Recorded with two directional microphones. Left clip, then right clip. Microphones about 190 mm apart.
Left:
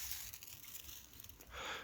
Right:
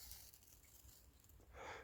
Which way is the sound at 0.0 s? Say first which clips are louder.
Left 12 dB; 25° right (ahead or behind).